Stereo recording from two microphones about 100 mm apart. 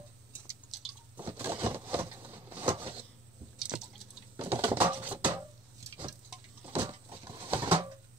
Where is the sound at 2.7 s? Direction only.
55° right (ahead or behind).